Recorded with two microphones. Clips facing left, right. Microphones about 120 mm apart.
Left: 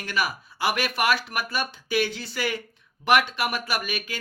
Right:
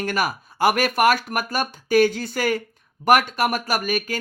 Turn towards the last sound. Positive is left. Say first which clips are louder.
# right 6 dB
turn(degrees=-45)  # may be behind; listen again after turning